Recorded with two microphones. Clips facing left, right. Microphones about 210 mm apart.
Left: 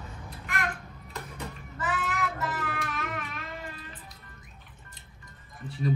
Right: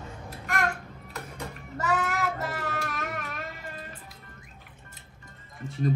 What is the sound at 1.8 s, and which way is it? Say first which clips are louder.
Music: right 4 dB; 45° right (ahead or behind).